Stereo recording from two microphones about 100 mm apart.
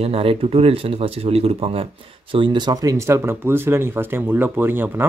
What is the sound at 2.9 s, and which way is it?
Speech, 25° right (ahead or behind).